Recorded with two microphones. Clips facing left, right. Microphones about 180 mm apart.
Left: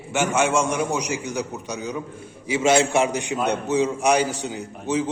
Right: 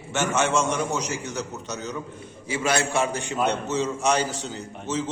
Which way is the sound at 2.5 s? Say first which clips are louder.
Left 6 dB; 25° left (ahead or behind).